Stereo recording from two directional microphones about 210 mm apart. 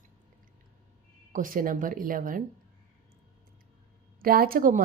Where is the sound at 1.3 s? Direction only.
40° right (ahead or behind).